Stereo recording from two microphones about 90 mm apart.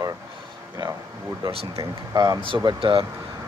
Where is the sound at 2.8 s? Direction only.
75° right (ahead or behind).